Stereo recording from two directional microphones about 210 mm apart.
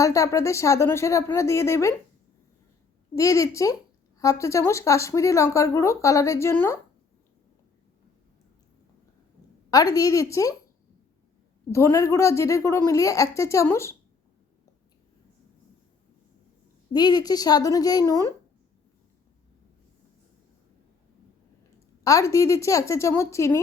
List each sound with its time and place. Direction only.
0.0 s speech: 15° left (ahead or behind)
3.2 s speech: 15° left (ahead or behind)
9.6 s speech: 15° left (ahead or behind)
11.7 s speech: 15° left (ahead or behind)
16.9 s speech: 20° left (ahead or behind)
22.0 s speech: 15° left (ahead or behind)